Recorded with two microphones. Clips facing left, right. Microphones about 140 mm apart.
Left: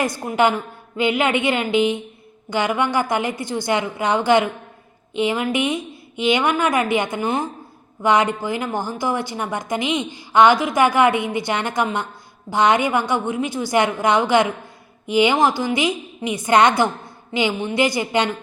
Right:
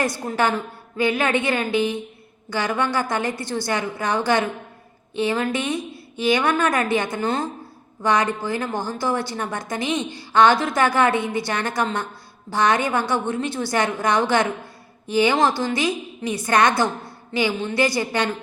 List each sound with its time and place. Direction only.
0.3 s a woman's voice: 15° left (ahead or behind)